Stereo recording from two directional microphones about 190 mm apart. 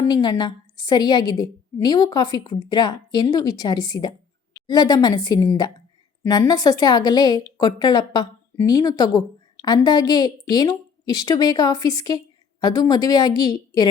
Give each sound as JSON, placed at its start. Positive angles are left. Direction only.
{"t": 0.0, "sound": "a woman's voice", "side_deg": 20}